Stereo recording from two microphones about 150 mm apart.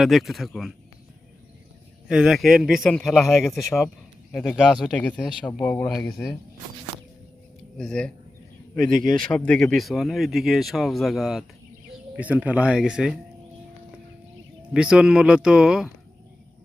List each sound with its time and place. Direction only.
0.0 s speech: centre (ahead or behind)
2.0 s speech: 5° right (ahead or behind)
7.8 s speech: 5° left (ahead or behind)
8.9 s a man's voice: 65° right (ahead or behind)
9.1 s speech: 5° left (ahead or behind)
14.7 s speech: 5° right (ahead or behind)